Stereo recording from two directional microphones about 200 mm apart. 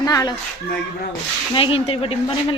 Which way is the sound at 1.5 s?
25° left (ahead or behind).